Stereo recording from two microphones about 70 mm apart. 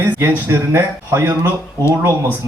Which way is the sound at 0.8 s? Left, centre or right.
Right.